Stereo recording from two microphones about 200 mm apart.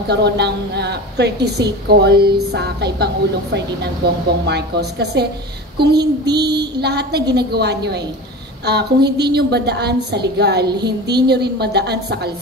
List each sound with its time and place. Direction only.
0.1 s a woman's voice: 55° right (ahead or behind)